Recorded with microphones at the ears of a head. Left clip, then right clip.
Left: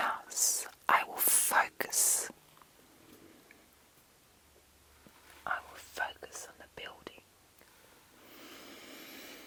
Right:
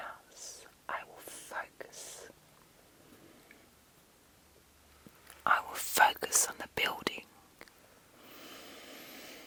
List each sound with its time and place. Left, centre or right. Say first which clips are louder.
0.0 s whispering: left 13 dB; left
5.4 s whispering: right 8 dB; right
8.8 s vehicle: even; centre